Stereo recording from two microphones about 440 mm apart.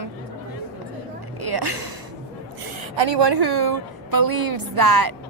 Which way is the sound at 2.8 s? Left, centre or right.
Right.